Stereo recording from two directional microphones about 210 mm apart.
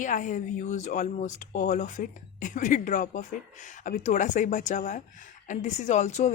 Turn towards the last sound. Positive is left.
turn(degrees=35)  # may be behind; listen again after turning